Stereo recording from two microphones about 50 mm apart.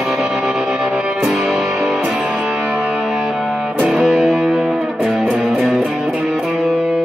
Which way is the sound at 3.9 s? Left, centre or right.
Centre.